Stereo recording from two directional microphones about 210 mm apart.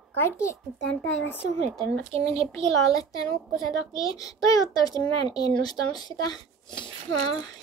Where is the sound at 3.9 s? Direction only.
15° left (ahead or behind).